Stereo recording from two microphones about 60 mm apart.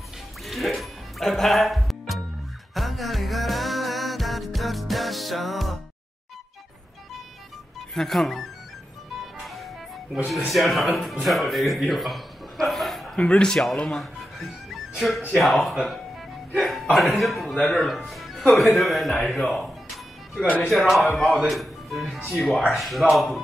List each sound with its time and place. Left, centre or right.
0.5 s music: centre
7.9 s speech: centre
10.5 s a man's voice: centre
13.3 s speech: centre
13.8 s music: centre
15.3 s speech: centre
20.4 s speech: left
20.7 s speech: centre